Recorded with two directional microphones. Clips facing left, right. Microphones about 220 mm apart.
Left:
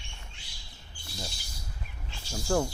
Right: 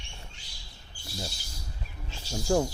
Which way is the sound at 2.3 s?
15° right (ahead or behind).